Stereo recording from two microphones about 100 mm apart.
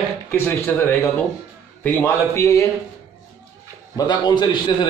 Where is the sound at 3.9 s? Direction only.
45° left (ahead or behind).